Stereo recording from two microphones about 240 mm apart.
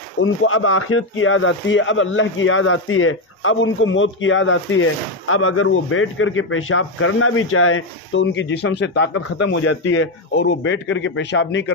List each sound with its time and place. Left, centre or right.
0.2 s speech: left